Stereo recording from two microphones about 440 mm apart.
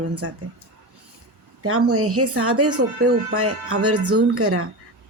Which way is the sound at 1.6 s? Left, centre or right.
Right.